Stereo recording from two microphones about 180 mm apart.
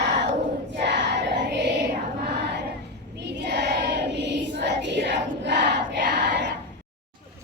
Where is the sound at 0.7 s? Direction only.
70° right (ahead or behind).